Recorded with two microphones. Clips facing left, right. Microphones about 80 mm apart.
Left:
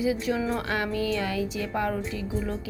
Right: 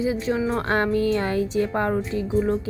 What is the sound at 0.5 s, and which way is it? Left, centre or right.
A woman's voice, right.